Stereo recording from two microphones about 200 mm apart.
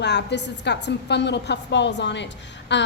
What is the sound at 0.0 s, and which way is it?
A woman's voice, 60° left (ahead or behind).